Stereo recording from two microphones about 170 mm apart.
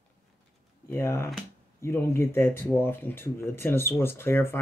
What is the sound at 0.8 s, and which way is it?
Speech, 15° left (ahead or behind).